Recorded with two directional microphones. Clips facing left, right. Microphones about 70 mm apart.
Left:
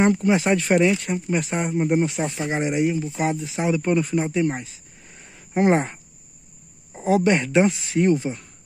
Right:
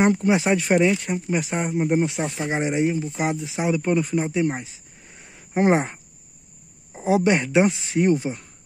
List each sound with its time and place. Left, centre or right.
0.1 s speech: right
0.5 s speech: centre
2.3 s speech: centre
3.2 s speech: centre
5.5 s speech: centre